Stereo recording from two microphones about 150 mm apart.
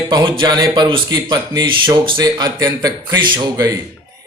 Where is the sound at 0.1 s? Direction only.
30° right (ahead or behind).